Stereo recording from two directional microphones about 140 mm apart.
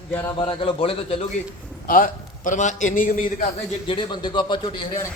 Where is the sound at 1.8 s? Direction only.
85° left.